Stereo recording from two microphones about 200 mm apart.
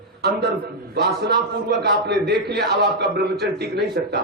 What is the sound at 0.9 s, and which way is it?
A man's voice, 55° right (ahead or behind).